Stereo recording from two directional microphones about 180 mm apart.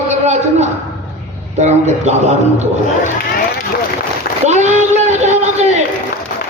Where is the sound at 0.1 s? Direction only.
40° right (ahead or behind).